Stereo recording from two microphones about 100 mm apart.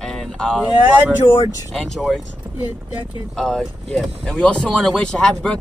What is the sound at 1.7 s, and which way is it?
Speech, 5° left (ahead or behind).